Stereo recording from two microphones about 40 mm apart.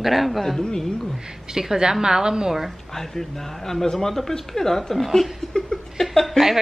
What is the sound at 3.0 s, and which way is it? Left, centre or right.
Speech, centre.